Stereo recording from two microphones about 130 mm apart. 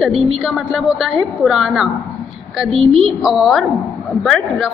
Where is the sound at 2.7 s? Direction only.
45° right (ahead or behind).